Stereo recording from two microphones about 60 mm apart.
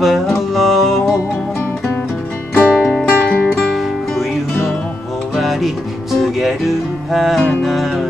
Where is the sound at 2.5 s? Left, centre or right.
Left.